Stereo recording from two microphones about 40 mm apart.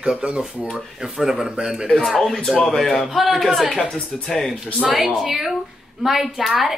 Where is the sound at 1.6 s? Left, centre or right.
Centre.